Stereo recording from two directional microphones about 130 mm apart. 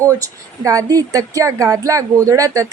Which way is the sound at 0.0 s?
25° right (ahead or behind).